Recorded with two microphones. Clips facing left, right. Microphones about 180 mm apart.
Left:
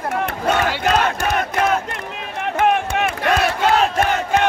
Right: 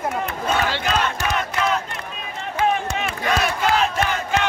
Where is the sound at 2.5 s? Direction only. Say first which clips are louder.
Left 3 dB; 60° left (ahead or behind).